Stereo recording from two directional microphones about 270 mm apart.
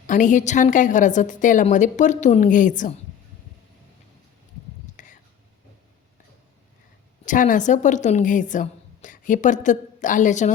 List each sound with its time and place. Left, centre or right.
0.1 s a woman's voice: left
5.0 s whispering: left
7.3 s a woman's voice: left